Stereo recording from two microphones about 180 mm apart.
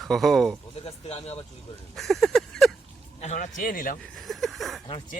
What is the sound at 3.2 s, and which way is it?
Speech, 40° left (ahead or behind).